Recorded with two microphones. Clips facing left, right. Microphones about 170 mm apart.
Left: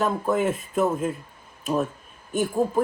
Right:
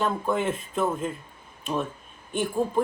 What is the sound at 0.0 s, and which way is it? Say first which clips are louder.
Speech: left 3 dB; 5° left (ahead or behind).